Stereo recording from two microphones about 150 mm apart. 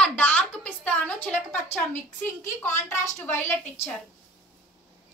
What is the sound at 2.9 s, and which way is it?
Speech, 15° left (ahead or behind).